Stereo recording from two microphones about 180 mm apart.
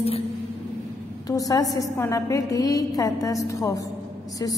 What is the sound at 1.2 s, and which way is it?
A woman's voice, 20° left (ahead or behind).